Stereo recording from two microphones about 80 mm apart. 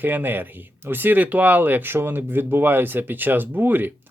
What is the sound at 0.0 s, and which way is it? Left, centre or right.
Speech, right.